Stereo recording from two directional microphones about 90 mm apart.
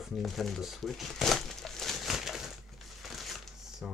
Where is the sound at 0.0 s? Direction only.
Centre (ahead or behind).